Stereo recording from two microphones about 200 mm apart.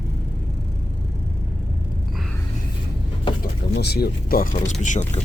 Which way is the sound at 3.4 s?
55° left (ahead or behind).